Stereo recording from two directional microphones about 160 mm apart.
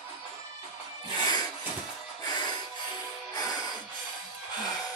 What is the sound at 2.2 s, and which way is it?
Music, 25° left (ahead or behind).